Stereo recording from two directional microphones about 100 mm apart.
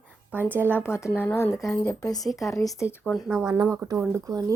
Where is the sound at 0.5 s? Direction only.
20° right (ahead or behind).